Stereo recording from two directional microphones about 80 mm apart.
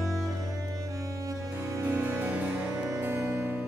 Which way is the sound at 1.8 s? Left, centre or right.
Right.